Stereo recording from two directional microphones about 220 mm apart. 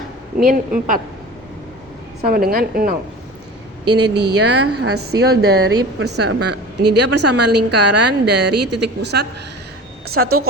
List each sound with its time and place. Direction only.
0.3 s a woman's voice: 40° right (ahead or behind)
2.3 s a woman's voice: 40° right (ahead or behind)
3.9 s a woman's voice: 50° right (ahead or behind)